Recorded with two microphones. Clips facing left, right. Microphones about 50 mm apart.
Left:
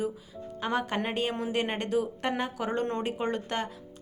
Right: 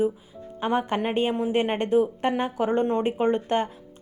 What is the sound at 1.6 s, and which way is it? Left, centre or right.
A woman's voice, right.